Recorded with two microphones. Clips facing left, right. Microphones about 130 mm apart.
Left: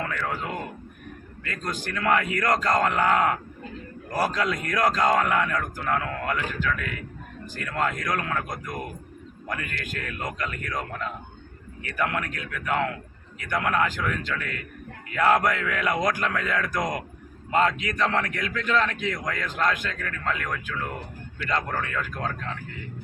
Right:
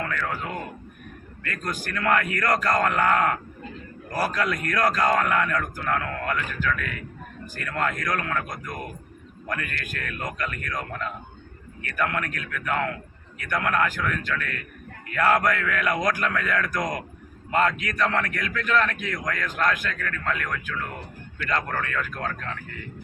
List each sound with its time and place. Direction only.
0.1 s a man's voice: 15° left (ahead or behind)